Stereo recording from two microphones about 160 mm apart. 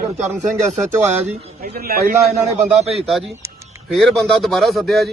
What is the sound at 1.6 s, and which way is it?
Speech, 70° right (ahead or behind).